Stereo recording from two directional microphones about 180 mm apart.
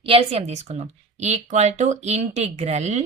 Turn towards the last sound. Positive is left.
turn(degrees=-40)  # may be behind; listen again after turning